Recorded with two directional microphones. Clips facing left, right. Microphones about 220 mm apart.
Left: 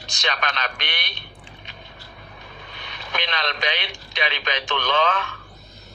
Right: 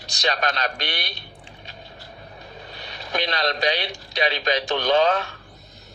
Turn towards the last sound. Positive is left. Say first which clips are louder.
# right 4 dB
turn(degrees=-40)  # may be behind; listen again after turning